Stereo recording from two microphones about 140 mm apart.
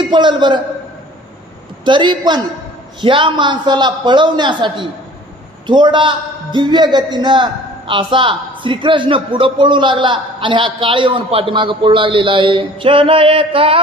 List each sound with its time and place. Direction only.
0.0 s a man's voice: 35° right (ahead or behind)
1.9 s a man's voice: 35° right (ahead or behind)